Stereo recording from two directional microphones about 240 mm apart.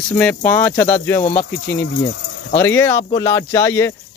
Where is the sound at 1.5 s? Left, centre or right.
Left.